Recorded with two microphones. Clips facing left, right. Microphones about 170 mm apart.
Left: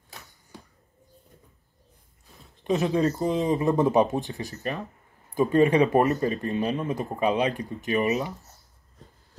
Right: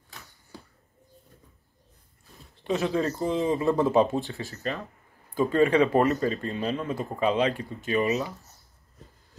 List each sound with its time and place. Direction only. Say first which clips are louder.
2.6 s speech: left 3 dB; 20° left (ahead or behind)